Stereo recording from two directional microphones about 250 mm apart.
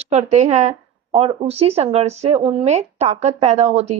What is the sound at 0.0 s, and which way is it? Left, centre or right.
Speech, right.